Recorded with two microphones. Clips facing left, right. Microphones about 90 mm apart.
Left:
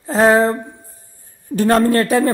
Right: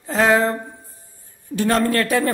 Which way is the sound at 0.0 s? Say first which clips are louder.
Left 4 dB; 30° left (ahead or behind).